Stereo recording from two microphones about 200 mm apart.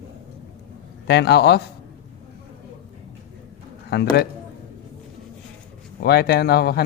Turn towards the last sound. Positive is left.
turn(degrees=55)  # may be behind; listen again after turning